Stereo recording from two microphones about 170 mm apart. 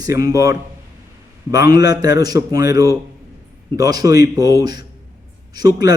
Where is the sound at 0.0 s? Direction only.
20° right (ahead or behind).